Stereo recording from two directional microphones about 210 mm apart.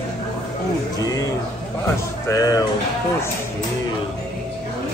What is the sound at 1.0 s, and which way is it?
Speech, 15° left (ahead or behind).